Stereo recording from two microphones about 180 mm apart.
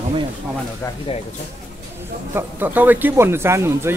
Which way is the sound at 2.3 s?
10° right (ahead or behind).